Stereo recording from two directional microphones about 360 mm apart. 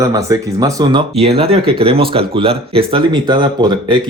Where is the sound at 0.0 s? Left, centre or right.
Centre.